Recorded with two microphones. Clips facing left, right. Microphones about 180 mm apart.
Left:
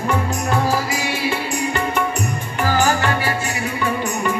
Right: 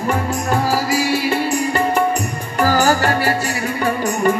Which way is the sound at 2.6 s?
40° right (ahead or behind).